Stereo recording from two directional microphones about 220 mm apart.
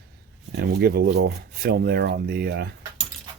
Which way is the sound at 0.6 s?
45° right (ahead or behind).